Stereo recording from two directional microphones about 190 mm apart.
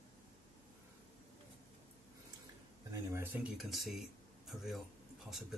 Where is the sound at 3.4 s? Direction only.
Centre (ahead or behind).